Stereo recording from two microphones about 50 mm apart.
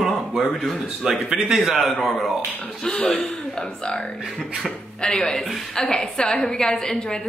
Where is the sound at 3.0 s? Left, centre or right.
Centre.